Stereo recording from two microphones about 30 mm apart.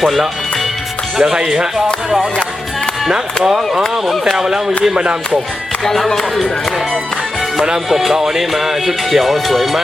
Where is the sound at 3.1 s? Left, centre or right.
Right.